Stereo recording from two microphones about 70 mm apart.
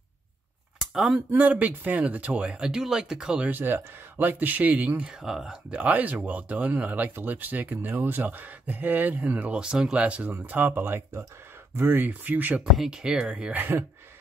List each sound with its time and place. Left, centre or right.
0.7 s a sound: centre
1.3 s speech: right
3.4 s speech: right
5.1 s speech: centre; by 12.6 s right
12.7 s speech: centre
13.6 s speech: right